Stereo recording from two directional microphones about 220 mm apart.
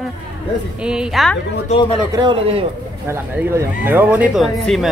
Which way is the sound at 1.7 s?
30° left (ahead or behind).